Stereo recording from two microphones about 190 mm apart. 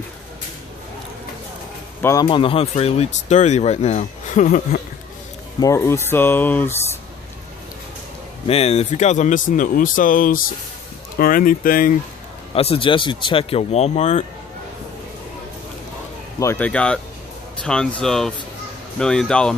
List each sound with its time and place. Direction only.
2.0 s a sound: 15° left (ahead or behind)
2.2 s speech: 30° left (ahead or behind)
5.6 s speech: 15° left (ahead or behind)
8.5 s speech: 30° left (ahead or behind)
12.5 s speech: 30° left (ahead or behind)
16.3 s speech: 10° left (ahead or behind)